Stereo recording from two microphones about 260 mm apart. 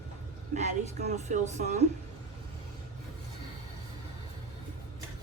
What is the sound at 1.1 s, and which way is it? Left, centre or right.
Speech, right.